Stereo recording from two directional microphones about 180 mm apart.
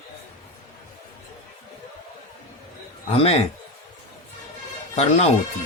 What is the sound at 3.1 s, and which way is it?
Speech, 35° left (ahead or behind).